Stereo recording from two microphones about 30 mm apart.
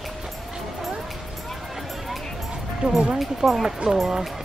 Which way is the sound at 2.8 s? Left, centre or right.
Right.